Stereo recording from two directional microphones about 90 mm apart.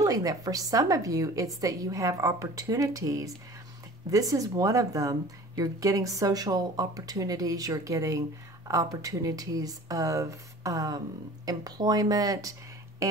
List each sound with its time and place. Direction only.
0.0 s a woman's voice: 40° right (ahead or behind)